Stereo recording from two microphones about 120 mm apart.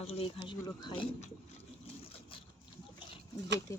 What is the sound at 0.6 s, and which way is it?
Speech, 40° left (ahead or behind).